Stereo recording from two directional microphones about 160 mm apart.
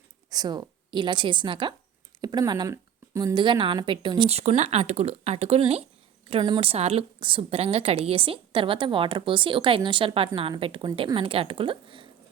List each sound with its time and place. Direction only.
0.3 s a woman's voice: 25° right (ahead or behind)
4.3 s a woman's voice: 45° right (ahead or behind)